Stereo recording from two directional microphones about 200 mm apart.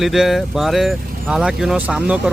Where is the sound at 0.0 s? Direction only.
Centre (ahead or behind).